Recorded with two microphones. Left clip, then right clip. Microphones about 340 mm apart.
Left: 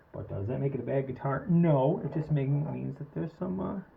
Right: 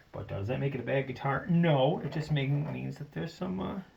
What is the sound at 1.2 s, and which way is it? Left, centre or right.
Speech, right.